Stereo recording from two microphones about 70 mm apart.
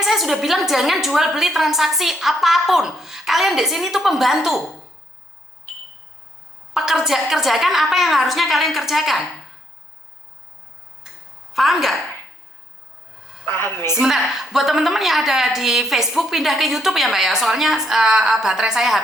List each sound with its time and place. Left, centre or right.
0.0 s a woman's voice: centre
6.7 s a woman's voice: centre
11.5 s a woman's voice: centre
13.4 s a woman's voice: left
13.9 s a woman's voice: centre